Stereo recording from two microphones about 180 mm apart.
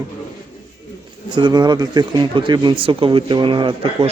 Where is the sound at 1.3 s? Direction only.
25° right (ahead or behind).